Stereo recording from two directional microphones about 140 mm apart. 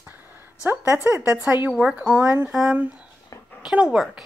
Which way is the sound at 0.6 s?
15° right (ahead or behind).